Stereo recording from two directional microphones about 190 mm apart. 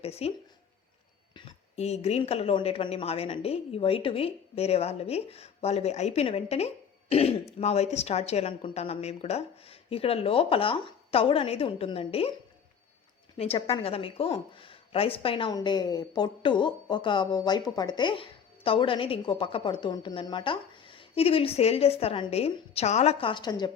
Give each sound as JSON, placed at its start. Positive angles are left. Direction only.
{"t": 0.0, "sound": "a woman's voice", "side_deg": 30}
{"t": 13.3, "sound": "speech", "side_deg": 30}